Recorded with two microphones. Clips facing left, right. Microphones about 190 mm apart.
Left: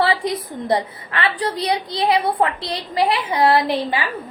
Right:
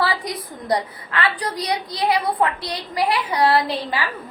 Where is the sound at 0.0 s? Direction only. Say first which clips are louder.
Left 4 dB; 25° left (ahead or behind).